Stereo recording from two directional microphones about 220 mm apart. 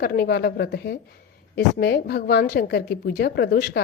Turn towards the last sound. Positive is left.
turn(degrees=45)  # may be behind; listen again after turning